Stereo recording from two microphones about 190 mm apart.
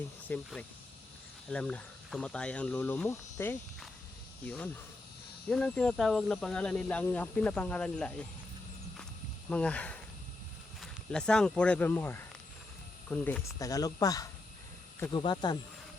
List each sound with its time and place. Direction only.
0.3 s speech: 10° left (ahead or behind)
1.5 s speech: 5° left (ahead or behind)
9.5 s speech: 5° left (ahead or behind)
13.6 s speech: 20° left (ahead or behind)